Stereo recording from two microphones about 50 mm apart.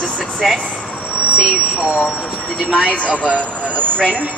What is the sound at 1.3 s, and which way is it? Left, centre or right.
Speech, centre.